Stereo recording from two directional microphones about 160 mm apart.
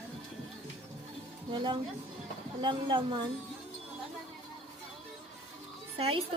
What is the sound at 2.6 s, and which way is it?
Speech, 30° right (ahead or behind).